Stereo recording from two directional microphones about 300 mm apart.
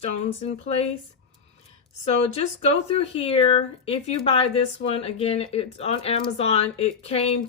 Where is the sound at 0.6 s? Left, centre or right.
Left.